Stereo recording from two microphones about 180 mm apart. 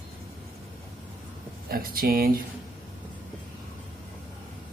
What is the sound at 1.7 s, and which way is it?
Speech, 55° right (ahead or behind).